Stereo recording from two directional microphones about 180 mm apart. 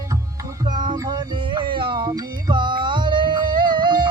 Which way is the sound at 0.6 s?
25° right (ahead or behind).